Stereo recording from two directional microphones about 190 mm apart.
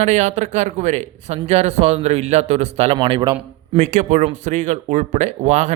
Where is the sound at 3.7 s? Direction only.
40° right (ahead or behind).